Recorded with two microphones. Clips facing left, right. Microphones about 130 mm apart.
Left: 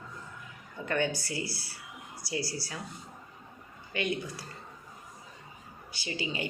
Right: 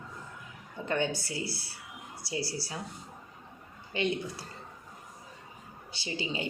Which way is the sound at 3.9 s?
25° right (ahead or behind).